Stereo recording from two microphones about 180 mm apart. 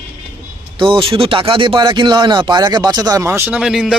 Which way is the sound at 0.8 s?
30° right (ahead or behind).